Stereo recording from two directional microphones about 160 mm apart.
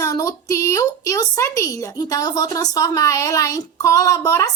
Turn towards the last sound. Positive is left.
turn(degrees=20)  # may be behind; listen again after turning